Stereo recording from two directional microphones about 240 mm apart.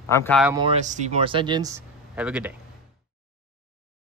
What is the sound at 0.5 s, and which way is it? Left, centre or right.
Speech, right.